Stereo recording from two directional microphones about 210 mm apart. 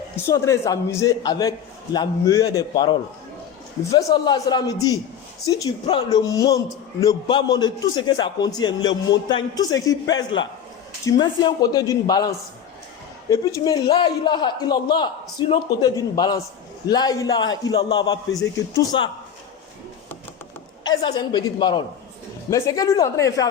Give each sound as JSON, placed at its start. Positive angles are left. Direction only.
{"t": 0.3, "sound": "a man's voice", "side_deg": 15}
{"t": 3.9, "sound": "a man's voice", "side_deg": 20}
{"t": 13.3, "sound": "a man's voice", "side_deg": 15}
{"t": 20.8, "sound": "a man's voice", "side_deg": 20}